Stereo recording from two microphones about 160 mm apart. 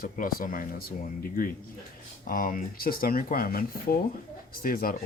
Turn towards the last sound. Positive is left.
turn(degrees=65)  # may be behind; listen again after turning